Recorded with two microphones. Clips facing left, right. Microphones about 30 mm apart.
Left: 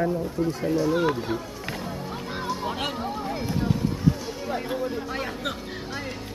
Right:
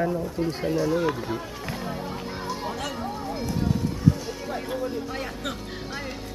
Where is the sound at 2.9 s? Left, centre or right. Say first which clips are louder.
Left 1 dB; left.